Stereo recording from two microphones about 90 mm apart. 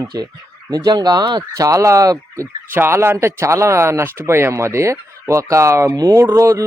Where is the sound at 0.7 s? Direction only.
50° right (ahead or behind).